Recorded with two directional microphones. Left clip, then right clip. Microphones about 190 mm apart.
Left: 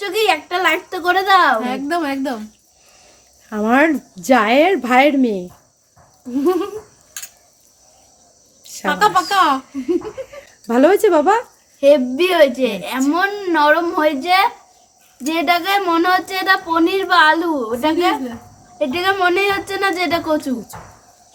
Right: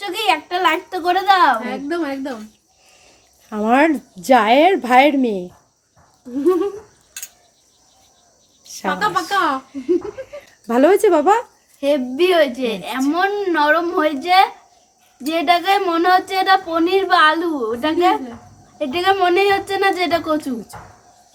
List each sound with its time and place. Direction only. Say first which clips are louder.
0.0 s a sound: left 2 dB; centre (ahead or behind)
1.6 s a woman's voice: left 3 dB; 40° left (ahead or behind)
3.5 s speech: even; 5° right (ahead or behind)
6.3 s speech: even; 45° left (ahead or behind)
8.9 s speech: left 4 dB; 40° left (ahead or behind)
10.7 s speech: left 1 dB; 10° right (ahead or behind)
11.8 s speech: left 5 dB; 5° left (ahead or behind)